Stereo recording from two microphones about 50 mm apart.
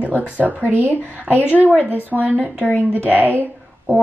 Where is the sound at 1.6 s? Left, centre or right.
Right.